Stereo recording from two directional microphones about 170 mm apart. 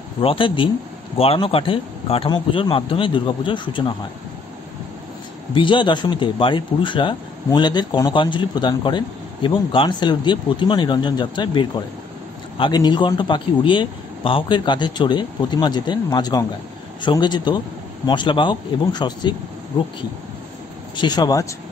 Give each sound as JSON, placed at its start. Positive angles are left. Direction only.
{"t": 0.2, "sound": "speech", "side_deg": 30}
{"t": 5.5, "sound": "speech", "side_deg": 30}
{"t": 20.9, "sound": "speech", "side_deg": 25}